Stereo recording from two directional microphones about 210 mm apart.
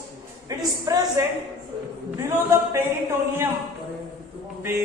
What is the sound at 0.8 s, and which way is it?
Speech, 20° right (ahead or behind).